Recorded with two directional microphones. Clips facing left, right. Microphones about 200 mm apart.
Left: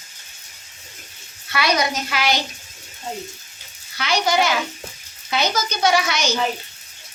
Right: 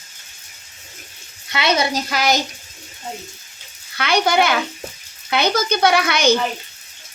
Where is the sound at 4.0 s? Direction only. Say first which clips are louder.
Right 3 dB; 60° right (ahead or behind).